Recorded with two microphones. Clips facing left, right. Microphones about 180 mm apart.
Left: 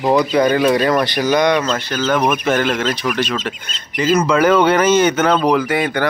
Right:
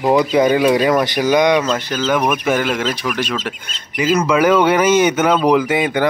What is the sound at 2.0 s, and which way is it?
Speech, 5° right (ahead or behind).